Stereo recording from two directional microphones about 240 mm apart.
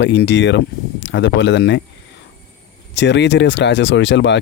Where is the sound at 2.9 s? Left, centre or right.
Left.